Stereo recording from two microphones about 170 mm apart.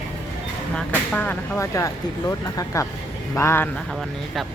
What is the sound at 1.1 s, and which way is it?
Speech, 10° left (ahead or behind).